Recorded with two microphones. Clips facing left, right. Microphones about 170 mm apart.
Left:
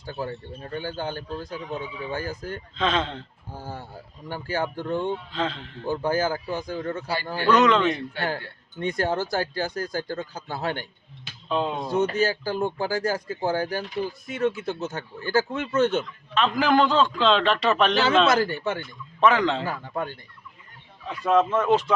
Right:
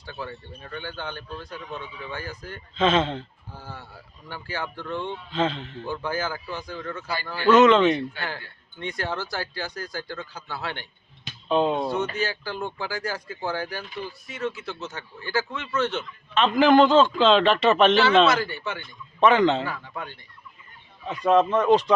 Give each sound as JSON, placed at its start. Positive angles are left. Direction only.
{"t": 0.0, "sound": "speech", "side_deg": 40}
{"t": 2.7, "sound": "a man's voice", "side_deg": -5}
{"t": 3.5, "sound": "speech", "side_deg": 45}
{"t": 5.3, "sound": "a man's voice", "side_deg": 0}
{"t": 5.8, "sound": "speech", "side_deg": 45}
{"t": 7.5, "sound": "a man's voice", "side_deg": -5}
{"t": 8.8, "sound": "speech", "side_deg": 45}
{"t": 11.4, "sound": "speech", "side_deg": 0}
{"t": 11.9, "sound": "speech", "side_deg": 45}
{"t": 16.3, "sound": "a man's voice", "side_deg": 0}
{"t": 18.3, "sound": "speech", "side_deg": 45}
{"t": 19.2, "sound": "a man's voice", "side_deg": 0}
{"t": 19.6, "sound": "speech", "side_deg": 40}
{"t": 21.2, "sound": "a man's voice", "side_deg": 5}